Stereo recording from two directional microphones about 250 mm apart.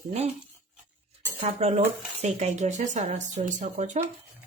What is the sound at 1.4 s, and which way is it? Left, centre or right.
Speech, right.